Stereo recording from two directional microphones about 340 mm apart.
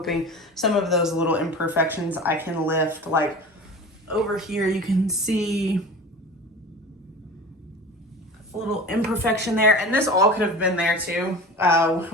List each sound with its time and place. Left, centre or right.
0.0 s speech: centre
8.5 s speech: centre